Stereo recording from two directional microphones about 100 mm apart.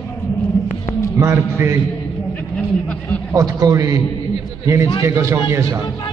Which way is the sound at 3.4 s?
35° right (ahead or behind).